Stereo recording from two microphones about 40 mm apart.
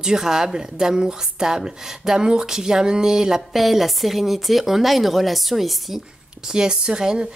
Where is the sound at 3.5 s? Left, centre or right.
Centre.